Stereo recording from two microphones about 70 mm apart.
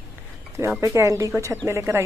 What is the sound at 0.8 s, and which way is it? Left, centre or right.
Speech, right.